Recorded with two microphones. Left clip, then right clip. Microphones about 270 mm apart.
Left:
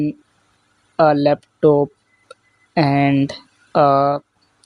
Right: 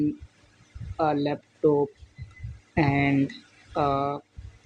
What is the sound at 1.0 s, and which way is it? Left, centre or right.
Speech, left.